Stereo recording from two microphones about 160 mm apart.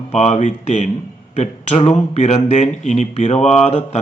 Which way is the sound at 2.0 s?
45° left (ahead or behind).